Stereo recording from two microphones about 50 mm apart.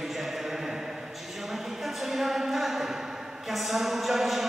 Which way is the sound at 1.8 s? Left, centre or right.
Centre.